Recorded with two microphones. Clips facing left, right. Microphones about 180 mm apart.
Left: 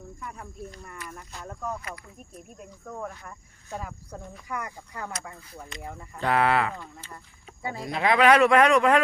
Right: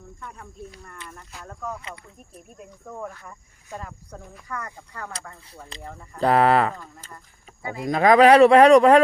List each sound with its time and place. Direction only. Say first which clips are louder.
0.2 s snake: even; 5° left (ahead or behind)
1.8 s speech: even; 25° right (ahead or behind)
2.3 s speech: right 1 dB; 5° right (ahead or behind)
6.1 s speech: right 5 dB; 35° right (ahead or behind)
7.9 s speech: right 6 dB; 45° right (ahead or behind)